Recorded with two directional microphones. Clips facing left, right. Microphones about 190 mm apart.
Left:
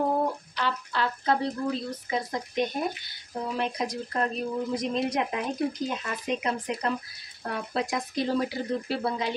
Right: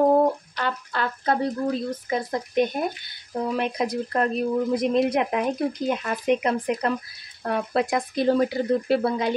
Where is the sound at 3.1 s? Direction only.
60° right (ahead or behind).